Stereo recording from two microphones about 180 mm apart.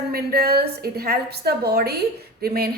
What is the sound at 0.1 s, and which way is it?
A woman's voice, 60° right (ahead or behind).